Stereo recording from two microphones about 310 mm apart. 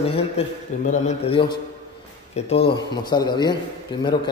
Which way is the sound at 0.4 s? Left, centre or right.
Centre.